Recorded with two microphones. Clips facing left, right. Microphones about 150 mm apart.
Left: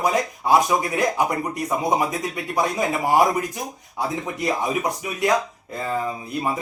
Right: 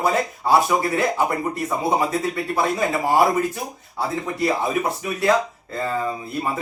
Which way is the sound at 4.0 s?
20° left (ahead or behind).